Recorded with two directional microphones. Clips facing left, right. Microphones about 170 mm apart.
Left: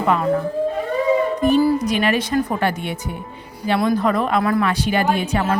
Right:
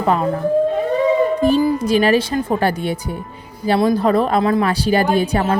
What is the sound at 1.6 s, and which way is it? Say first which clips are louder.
A woman's voice: right 2 dB; 30° right (ahead or behind).